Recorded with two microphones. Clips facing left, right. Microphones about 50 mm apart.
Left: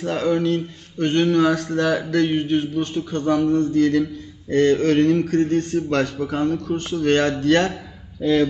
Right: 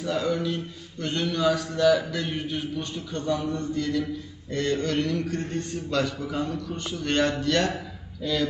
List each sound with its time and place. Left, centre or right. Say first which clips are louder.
0.0 s speech: left 6 dB; left